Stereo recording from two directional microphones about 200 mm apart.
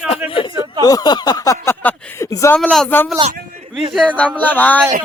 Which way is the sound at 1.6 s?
10° left (ahead or behind).